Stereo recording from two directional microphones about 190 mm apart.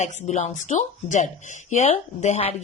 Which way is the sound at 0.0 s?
40° left (ahead or behind).